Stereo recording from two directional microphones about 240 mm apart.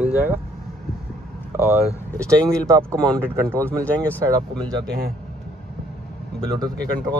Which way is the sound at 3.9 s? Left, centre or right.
Centre.